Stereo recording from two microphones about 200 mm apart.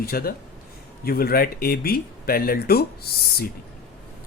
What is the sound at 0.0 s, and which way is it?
Speech, 50° left (ahead or behind).